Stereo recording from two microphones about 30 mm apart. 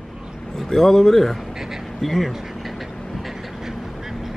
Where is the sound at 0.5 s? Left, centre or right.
Centre.